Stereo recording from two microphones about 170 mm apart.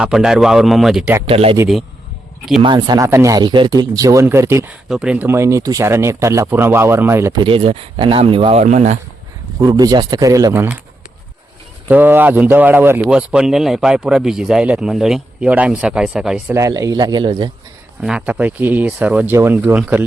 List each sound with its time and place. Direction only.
0.0 s a man's voice: 5° right (ahead or behind)
1.3 s speech: 35° right (ahead or behind)
2.6 s speech: 25° right (ahead or behind)
4.9 s speech: 5° right (ahead or behind)
7.3 s speech: 30° right (ahead or behind)
8.6 s speech: 45° right (ahead or behind)
9.6 s speech: 20° right (ahead or behind)
11.9 s a man's voice: 10° right (ahead or behind)
16.6 s speech: 20° right (ahead or behind)
18.0 s speech: 5° right (ahead or behind)